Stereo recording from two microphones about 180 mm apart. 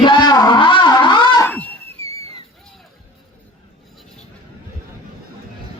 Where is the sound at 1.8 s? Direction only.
35° right (ahead or behind).